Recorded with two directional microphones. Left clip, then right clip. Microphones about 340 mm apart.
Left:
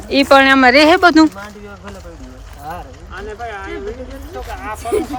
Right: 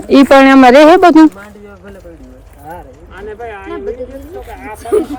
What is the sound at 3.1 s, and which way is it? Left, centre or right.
Clip-clop, centre.